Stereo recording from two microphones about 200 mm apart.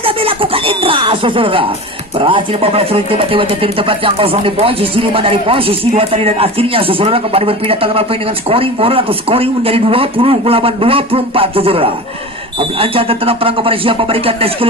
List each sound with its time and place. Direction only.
0.0 s speech: 25° right (ahead or behind)